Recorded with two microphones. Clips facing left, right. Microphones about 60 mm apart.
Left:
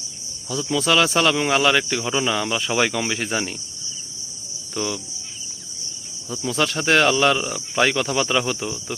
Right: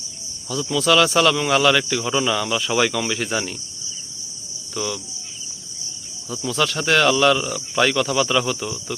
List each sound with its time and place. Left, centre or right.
0.7 s speech: left
6.4 s speech: left